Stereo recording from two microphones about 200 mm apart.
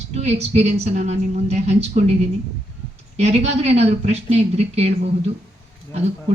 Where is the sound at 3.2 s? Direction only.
35° right (ahead or behind).